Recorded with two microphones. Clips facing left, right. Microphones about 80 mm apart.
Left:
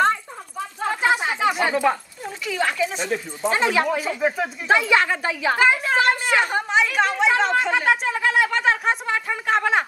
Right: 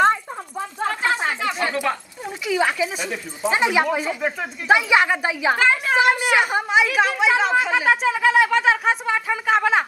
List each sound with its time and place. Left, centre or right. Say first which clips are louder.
0.8 s a sound: left 2 dB; centre
2.2 s speech: right 3 dB; centre
4.2 s speech: left 3 dB; centre
4.6 s a woman's voice: right 2 dB; centre